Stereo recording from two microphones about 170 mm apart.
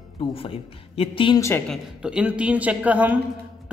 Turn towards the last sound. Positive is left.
turn(degrees=-10)  # may be behind; listen again after turning